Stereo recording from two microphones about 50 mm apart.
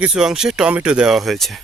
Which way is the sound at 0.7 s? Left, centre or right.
Right.